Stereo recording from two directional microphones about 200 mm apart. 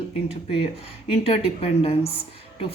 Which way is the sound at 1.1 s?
30° left (ahead or behind).